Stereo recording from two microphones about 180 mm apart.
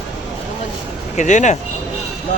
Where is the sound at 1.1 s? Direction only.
40° left (ahead or behind).